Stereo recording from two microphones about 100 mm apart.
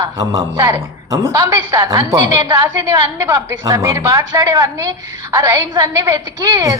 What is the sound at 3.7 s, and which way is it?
A woman's voice, 30° right (ahead or behind).